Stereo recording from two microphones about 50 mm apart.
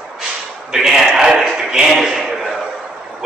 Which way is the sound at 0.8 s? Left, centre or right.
Centre.